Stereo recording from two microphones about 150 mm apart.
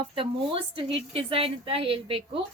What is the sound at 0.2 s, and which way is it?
A woman's voice, 35° right (ahead or behind).